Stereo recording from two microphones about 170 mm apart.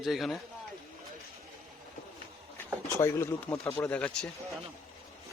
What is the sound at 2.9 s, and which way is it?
Speech, 15° left (ahead or behind).